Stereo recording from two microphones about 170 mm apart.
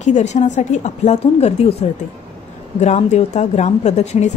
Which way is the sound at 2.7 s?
45° left (ahead or behind).